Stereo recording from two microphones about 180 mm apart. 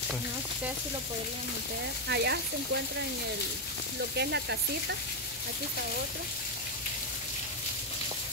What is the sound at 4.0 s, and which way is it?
Speech, 70° right (ahead or behind).